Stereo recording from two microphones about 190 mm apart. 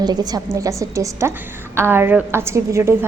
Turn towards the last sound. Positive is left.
turn(degrees=-15)  # may be behind; listen again after turning